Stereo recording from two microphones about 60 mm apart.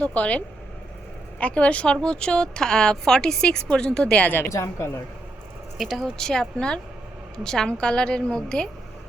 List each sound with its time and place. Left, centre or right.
0.0 s a woman's voice: left
4.4 s a woman's voice: left
5.7 s a woman's voice: centre